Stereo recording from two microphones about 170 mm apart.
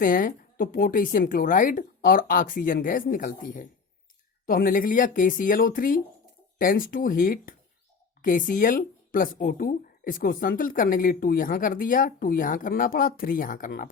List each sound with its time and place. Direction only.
0.0 s speech: 55° left (ahead or behind)